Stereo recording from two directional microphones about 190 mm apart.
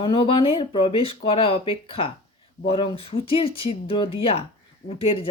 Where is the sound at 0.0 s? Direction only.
25° left (ahead or behind).